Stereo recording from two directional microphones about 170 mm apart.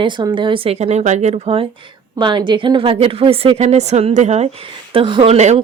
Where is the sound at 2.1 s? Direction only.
25° right (ahead or behind); by 4.4 s 45° right (ahead or behind).